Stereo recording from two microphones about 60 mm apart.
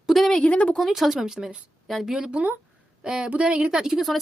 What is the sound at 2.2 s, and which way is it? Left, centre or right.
Speech, centre.